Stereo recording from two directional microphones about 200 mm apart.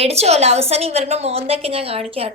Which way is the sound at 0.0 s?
30° right (ahead or behind).